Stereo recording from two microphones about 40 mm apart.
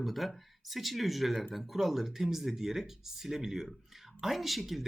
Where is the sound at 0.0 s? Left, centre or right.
Centre.